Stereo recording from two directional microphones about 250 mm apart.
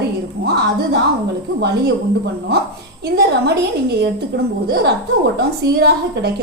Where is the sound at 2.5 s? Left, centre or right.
Right.